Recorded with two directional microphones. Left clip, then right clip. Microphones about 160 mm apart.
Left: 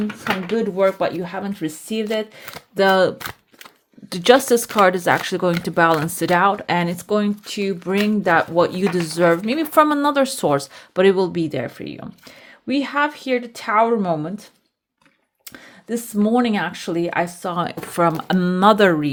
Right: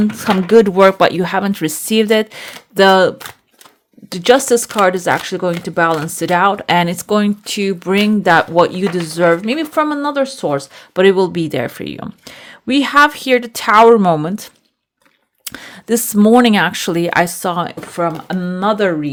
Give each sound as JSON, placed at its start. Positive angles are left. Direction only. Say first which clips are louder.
{"t": 0.2, "sound": "speech", "louder": "right 12 dB", "side_deg": -55}
{"t": 9.7, "sound": "a woman's voice", "louder": "left 2 dB", "side_deg": 5}
{"t": 10.8, "sound": "speech", "louder": "right 7 dB", "side_deg": -15}
{"t": 17.6, "sound": "speech", "louder": "right 1 dB", "side_deg": -5}